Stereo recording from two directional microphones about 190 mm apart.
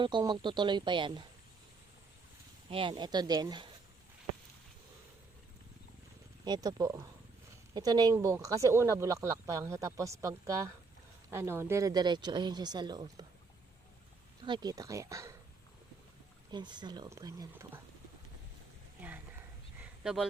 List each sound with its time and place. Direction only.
0.0 s speech: 25° right (ahead or behind)
2.6 s speech: 25° right (ahead or behind)
6.4 s speech: 20° right (ahead or behind)
14.4 s speech: 20° right (ahead or behind)
16.5 s speech: 25° right (ahead or behind)
18.9 s a sound: 10° right (ahead or behind)